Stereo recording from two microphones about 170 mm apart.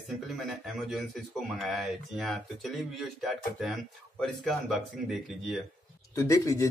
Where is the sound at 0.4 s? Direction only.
Centre (ahead or behind).